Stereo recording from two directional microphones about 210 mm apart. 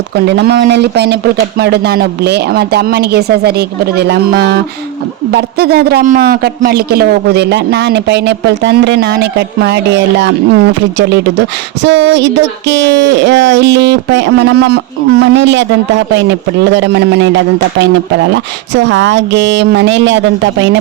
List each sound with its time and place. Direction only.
0.3 s a man's voice: 55° right (ahead or behind)
16.6 s a man's voice: 55° right (ahead or behind)